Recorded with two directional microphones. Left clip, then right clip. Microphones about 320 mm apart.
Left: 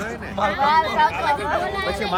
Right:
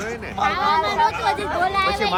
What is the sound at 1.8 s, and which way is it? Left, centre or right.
Speech, centre.